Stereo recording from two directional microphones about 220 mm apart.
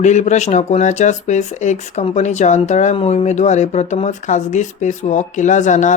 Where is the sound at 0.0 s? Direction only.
30° left (ahead or behind).